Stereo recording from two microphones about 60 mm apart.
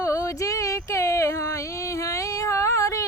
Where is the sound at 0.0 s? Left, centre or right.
Left.